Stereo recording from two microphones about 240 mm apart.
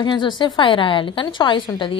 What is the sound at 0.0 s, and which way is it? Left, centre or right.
A woman's voice, centre.